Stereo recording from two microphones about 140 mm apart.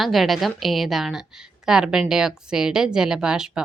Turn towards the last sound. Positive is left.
turn(degrees=-5)  # may be behind; listen again after turning